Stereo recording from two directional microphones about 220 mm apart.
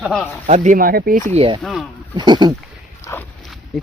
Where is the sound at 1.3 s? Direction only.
25° right (ahead or behind).